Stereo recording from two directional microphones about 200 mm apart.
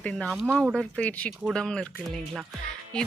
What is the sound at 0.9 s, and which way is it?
Speech, 5° left (ahead or behind).